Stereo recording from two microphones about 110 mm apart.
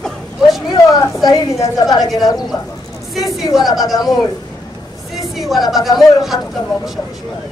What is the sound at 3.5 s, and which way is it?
Speech, centre (ahead or behind).